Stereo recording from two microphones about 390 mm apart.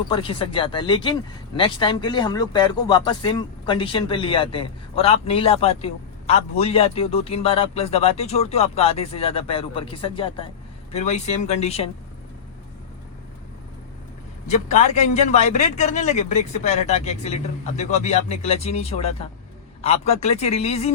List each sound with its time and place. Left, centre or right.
0.1 s speech: centre
14.4 s speech: centre